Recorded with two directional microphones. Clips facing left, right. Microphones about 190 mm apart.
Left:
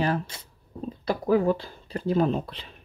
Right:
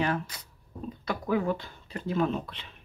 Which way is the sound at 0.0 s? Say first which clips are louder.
Left 3 dB; 35° left (ahead or behind).